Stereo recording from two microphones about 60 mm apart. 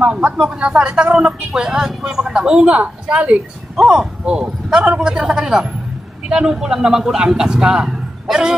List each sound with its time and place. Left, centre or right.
0.0 s speech: centre
3.7 s speech: centre